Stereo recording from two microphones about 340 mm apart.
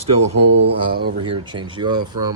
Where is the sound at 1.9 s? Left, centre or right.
Right.